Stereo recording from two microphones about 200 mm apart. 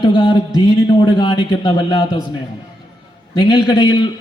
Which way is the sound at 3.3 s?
25° left (ahead or behind).